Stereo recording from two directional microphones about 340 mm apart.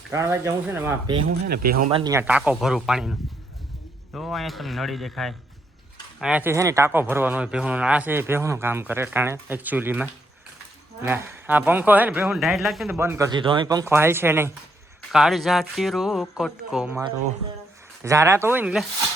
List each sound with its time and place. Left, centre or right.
0.1 s speech: centre
1.5 s speech: right
1.9 s a man's voice: centre
18.0 s speech: centre